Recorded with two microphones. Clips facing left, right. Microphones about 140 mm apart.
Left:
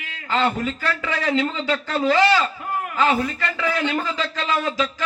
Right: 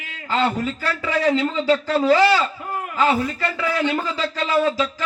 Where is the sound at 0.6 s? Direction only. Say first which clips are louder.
Even; 35° right (ahead or behind).